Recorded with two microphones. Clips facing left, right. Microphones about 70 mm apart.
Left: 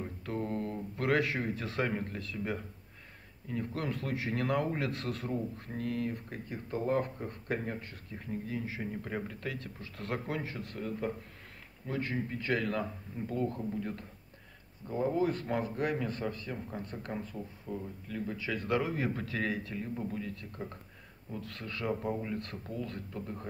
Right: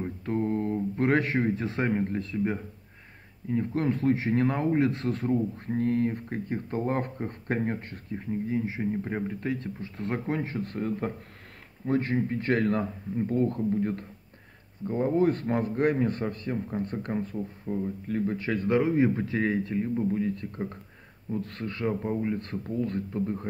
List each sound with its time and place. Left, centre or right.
0.0 s mantra: right
1.2 s speech: right
8.1 s speech: right
18.7 s speech: right